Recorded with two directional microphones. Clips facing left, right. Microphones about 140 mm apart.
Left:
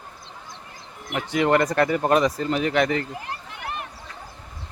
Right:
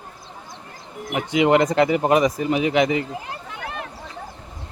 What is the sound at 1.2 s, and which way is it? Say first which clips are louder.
Speech: right 3 dB; 15° right (ahead or behind).